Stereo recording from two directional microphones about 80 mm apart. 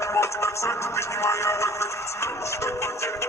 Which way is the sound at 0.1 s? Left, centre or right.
Left.